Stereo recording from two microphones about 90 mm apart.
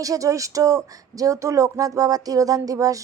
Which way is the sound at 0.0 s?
40° right (ahead or behind).